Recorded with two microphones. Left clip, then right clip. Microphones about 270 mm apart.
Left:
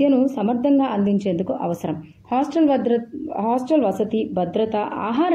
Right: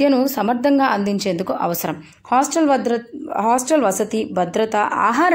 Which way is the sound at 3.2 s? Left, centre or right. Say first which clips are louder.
Right 7 dB; left.